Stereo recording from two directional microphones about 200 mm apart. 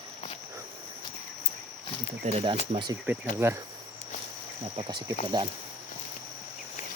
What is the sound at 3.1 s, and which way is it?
Speech, 10° right (ahead or behind).